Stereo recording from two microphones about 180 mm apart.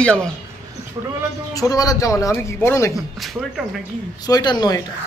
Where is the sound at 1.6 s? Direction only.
20° left (ahead or behind).